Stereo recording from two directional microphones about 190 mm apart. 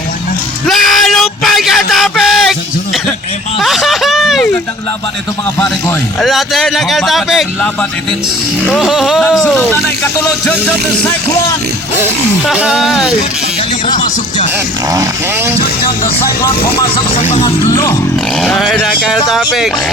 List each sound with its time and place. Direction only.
0.7 s music: centre (ahead or behind)
1.9 s a sound: centre (ahead or behind)
6.1 s speech: centre (ahead or behind)
12.5 s speech: centre (ahead or behind)
14.9 s speech: 10° right (ahead or behind)
16.9 s speech: 35° left (ahead or behind)
17.4 s speech: 15° left (ahead or behind)
18.3 s speech: centre (ahead or behind)